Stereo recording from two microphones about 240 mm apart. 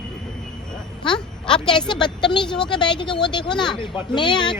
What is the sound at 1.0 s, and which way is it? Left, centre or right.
Speech, centre.